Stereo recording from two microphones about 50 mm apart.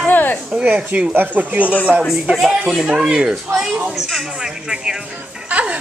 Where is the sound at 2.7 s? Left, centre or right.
Centre.